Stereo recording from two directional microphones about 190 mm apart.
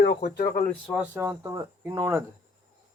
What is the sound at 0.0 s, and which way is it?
Speech, 60° left (ahead or behind).